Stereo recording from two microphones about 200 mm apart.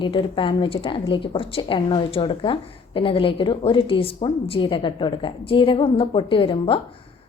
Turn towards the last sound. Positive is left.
turn(degrees=25)  # may be behind; listen again after turning